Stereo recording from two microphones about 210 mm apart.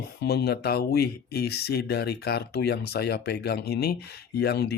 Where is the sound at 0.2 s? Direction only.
50° left (ahead or behind).